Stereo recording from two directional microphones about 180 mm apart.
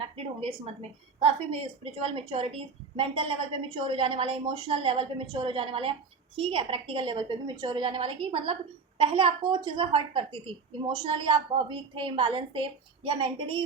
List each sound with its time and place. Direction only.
0.0 s a woman's voice: 30° right (ahead or behind)